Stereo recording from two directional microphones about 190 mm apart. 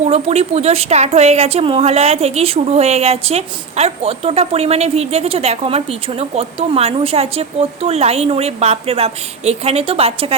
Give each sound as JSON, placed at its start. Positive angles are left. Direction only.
{"t": 0.0, "sound": "speech", "side_deg": -35}